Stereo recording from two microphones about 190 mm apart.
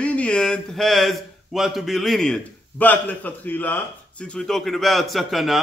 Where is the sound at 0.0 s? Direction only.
5° left (ahead or behind).